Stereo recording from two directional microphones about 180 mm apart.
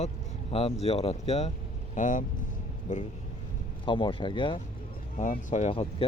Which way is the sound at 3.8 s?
25° left (ahead or behind).